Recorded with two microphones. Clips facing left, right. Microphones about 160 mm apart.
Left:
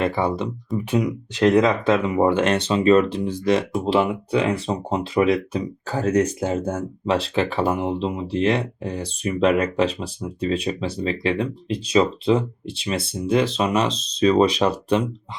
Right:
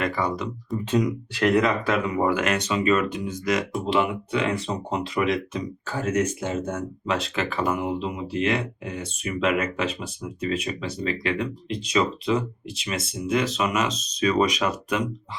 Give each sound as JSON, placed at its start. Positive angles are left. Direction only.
{"t": 0.0, "sound": "speech", "side_deg": 25}
{"t": 0.9, "sound": "speech", "side_deg": 10}
{"t": 1.3, "sound": "speech", "side_deg": 20}